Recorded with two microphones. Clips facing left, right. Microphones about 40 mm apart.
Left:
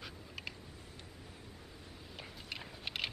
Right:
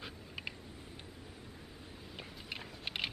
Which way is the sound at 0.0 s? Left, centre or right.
Centre.